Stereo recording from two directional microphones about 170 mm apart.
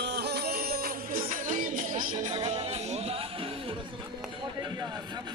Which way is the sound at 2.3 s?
35° right (ahead or behind).